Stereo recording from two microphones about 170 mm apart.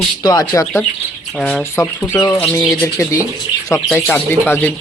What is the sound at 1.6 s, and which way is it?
Speech, 15° left (ahead or behind).